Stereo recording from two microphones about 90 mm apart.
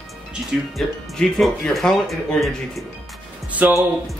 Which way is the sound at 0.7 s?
5° left (ahead or behind).